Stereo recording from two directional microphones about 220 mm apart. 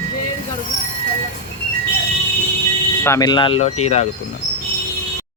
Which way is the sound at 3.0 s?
15° left (ahead or behind).